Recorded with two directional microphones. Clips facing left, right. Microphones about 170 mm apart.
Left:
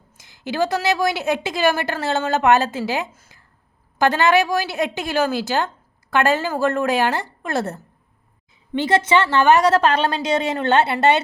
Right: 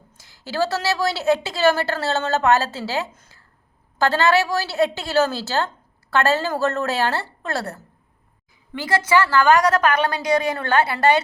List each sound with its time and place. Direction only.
0.2 s a woman's voice: 20° left (ahead or behind)